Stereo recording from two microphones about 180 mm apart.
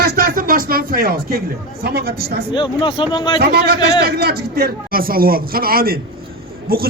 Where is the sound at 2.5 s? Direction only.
25° left (ahead or behind).